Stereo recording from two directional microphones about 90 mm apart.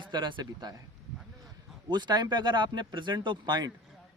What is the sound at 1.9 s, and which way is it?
Speech, 55° right (ahead or behind).